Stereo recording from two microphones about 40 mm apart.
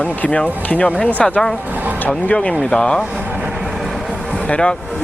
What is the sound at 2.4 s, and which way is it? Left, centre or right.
Speech, left.